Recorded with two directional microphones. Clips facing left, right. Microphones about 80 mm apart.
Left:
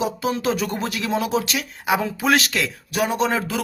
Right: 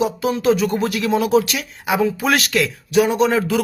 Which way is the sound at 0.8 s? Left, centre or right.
Left.